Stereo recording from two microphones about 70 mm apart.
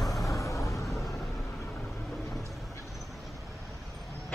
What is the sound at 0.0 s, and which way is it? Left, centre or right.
Vehicle, left.